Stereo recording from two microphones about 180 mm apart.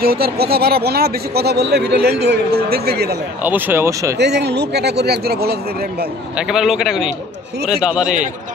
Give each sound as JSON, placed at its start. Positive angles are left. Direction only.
{"t": 0.0, "sound": "speech", "side_deg": -60}
{"t": 3.4, "sound": "speech", "side_deg": -10}
{"t": 4.2, "sound": "speech", "side_deg": -70}
{"t": 6.3, "sound": "a man's voice", "side_deg": -5}